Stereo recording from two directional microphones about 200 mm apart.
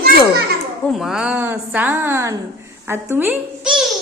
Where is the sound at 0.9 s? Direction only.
Centre (ahead or behind).